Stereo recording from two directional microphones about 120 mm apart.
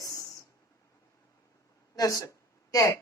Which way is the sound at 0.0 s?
30° left (ahead or behind).